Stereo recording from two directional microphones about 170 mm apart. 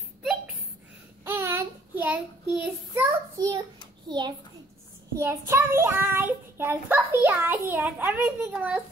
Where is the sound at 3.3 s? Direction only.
20° right (ahead or behind).